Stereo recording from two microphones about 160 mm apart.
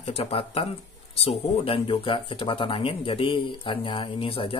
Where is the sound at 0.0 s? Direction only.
40° left (ahead or behind).